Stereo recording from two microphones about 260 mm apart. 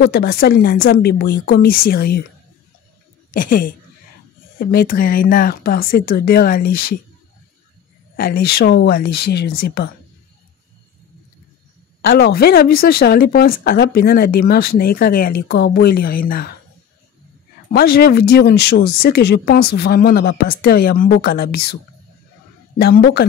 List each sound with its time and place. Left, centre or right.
0.0 s a woman's voice: left
3.3 s a woman's voice: left
8.2 s a woman's voice: left
12.0 s a woman's voice: left
17.6 s a woman's voice: left
22.8 s a woman's voice: left